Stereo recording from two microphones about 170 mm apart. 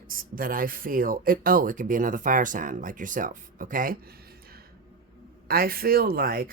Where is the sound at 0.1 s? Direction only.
55° right (ahead or behind).